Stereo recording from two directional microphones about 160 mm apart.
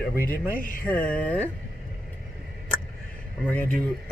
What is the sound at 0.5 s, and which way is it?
Speech, 60° left (ahead or behind).